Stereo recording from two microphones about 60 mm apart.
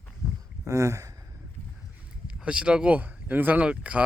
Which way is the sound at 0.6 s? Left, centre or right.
Right.